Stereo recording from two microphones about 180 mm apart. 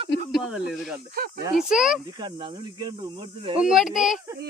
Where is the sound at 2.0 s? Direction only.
25° right (ahead or behind).